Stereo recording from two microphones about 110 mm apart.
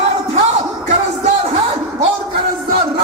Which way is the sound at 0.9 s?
90° right.